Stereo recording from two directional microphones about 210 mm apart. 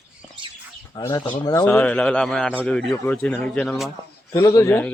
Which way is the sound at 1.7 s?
5° left (ahead or behind).